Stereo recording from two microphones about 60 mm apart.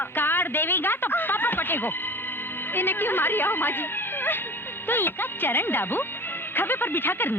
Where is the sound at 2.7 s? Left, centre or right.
Left.